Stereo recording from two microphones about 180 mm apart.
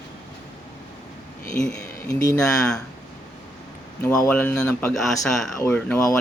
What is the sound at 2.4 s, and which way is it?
Speech, 5° left (ahead or behind).